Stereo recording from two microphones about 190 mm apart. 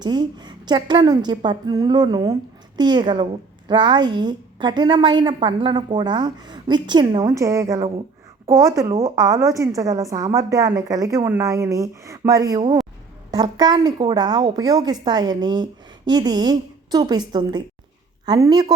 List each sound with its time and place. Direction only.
0.0 s a woman's voice: 25° right (ahead or behind)